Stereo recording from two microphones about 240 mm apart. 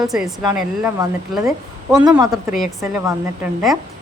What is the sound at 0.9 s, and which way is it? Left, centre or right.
Speech, centre.